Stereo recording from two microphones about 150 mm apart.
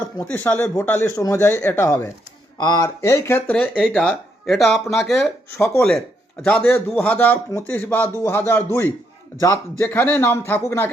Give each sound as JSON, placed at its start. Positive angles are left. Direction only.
{"t": 0.0, "sound": "speech", "side_deg": 15}
{"t": 3.8, "sound": "speech", "side_deg": -5}
{"t": 5.5, "sound": "speech", "side_deg": 15}